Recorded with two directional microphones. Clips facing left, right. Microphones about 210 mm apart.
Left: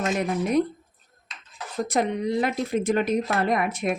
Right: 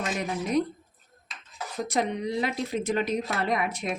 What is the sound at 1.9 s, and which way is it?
Speech, 50° left (ahead or behind).